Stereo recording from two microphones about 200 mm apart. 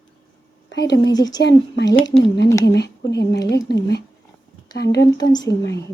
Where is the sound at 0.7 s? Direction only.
60° left (ahead or behind).